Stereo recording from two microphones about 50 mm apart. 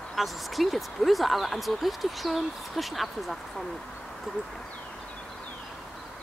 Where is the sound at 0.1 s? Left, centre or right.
Centre.